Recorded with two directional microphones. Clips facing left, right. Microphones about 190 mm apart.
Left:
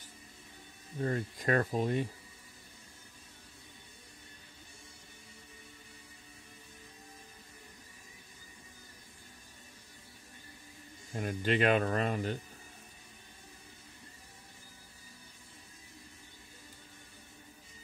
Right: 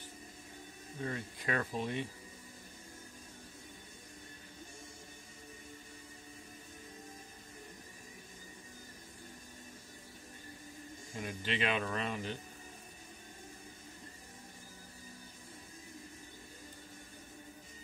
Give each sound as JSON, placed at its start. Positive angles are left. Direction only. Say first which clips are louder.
{"t": 1.0, "sound": "speech", "louder": "left 6 dB", "side_deg": 45}
{"t": 11.1, "sound": "speech", "louder": "left 7 dB", "side_deg": 45}